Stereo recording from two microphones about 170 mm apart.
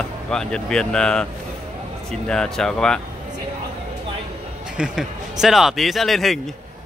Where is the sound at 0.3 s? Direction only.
5° left (ahead or behind).